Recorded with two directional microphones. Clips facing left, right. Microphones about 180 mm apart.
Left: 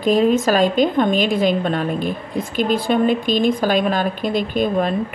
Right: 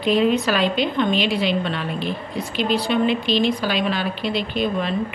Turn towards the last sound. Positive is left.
turn(degrees=50)  # may be behind; listen again after turning